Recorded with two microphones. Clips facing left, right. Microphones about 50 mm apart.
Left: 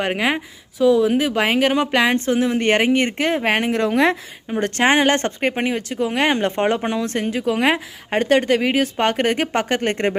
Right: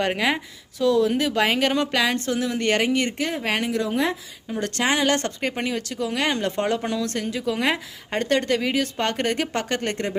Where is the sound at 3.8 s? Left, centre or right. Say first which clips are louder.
Left 9 dB; left.